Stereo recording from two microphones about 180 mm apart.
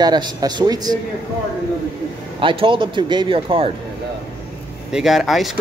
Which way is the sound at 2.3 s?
30° right (ahead or behind).